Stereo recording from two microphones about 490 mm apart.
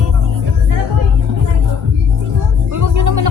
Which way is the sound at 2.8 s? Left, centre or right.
Right.